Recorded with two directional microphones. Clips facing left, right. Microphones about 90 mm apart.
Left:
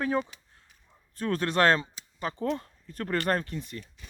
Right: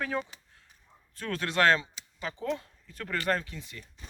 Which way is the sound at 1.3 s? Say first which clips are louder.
Left 1 dB; 45° left (ahead or behind).